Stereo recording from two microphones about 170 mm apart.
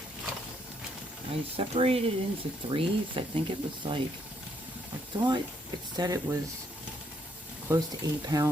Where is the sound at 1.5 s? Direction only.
35° right (ahead or behind).